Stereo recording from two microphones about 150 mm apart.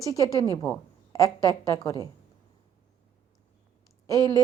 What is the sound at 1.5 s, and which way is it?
Speech, 25° left (ahead or behind).